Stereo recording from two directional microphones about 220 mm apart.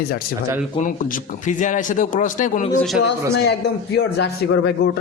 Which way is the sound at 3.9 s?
55° left (ahead or behind).